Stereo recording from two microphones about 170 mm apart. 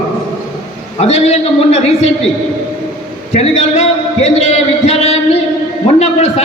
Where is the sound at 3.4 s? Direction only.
40° left (ahead or behind).